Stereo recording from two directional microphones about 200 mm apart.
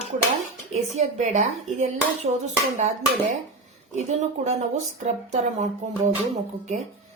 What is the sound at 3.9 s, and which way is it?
A woman's voice, 35° right (ahead or behind).